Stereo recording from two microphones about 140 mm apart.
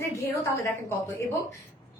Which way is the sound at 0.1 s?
20° left (ahead or behind).